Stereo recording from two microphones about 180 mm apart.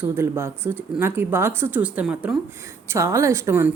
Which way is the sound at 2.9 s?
15° right (ahead or behind).